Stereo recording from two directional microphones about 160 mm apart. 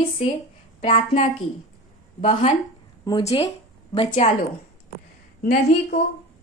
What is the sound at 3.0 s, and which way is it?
Speech, 25° left (ahead or behind).